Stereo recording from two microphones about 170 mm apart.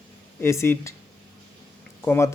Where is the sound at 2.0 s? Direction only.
15° left (ahead or behind).